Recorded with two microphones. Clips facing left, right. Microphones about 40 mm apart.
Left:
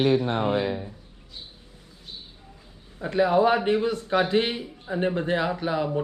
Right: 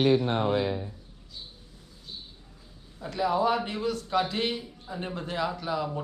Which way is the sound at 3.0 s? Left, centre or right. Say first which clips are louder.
Left 6 dB; left.